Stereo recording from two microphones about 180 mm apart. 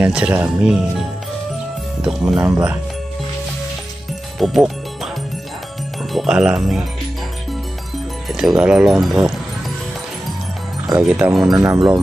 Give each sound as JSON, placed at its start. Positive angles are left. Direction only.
{"t": 0.0, "sound": "speech", "side_deg": -5}
{"t": 2.5, "sound": "speech", "side_deg": -15}
{"t": 4.4, "sound": "music", "side_deg": 0}
{"t": 6.1, "sound": "speech", "side_deg": -5}
{"t": 8.3, "sound": "speech", "side_deg": 0}
{"t": 11.1, "sound": "speech", "side_deg": -5}
{"t": 11.5, "sound": "speech", "side_deg": -20}